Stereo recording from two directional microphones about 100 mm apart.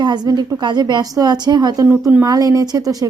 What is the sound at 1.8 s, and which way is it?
Speech, 20° right (ahead or behind).